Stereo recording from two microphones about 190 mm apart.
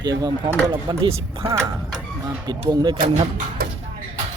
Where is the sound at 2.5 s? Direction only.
20° right (ahead or behind).